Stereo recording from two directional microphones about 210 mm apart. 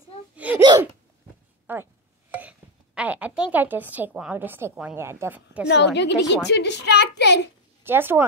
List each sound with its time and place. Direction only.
0.1 s a sound: 25° left (ahead or behind)
0.6 s hiccup: 20° right (ahead or behind)
1.7 s a woman's voice: 10° right (ahead or behind)
2.3 s a sound: 5° right (ahead or behind)
3.5 s a woman's voice: 10° right (ahead or behind)
5.7 s a child's voice: 55° left (ahead or behind)
7.8 s a woman's voice: 10° right (ahead or behind)